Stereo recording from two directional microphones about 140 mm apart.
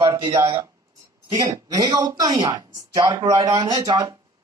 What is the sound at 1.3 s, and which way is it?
Speech, 30° right (ahead or behind).